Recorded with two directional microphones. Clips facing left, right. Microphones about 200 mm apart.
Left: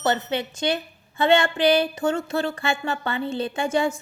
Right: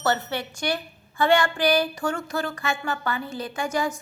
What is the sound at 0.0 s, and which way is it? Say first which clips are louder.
A woman's voice: left 2 dB; 20° left (ahead or behind).